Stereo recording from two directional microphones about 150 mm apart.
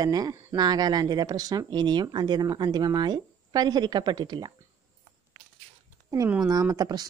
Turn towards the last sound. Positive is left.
turn(degrees=-25)  # may be behind; listen again after turning